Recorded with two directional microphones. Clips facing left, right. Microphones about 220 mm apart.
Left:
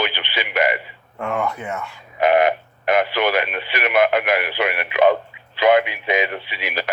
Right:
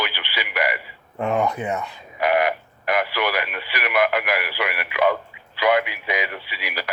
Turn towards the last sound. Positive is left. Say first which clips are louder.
# left 4 dB
turn(degrees=25)  # may be behind; listen again after turning